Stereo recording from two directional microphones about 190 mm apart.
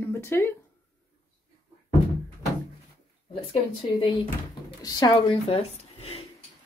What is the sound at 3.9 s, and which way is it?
Speech, 25° left (ahead or behind).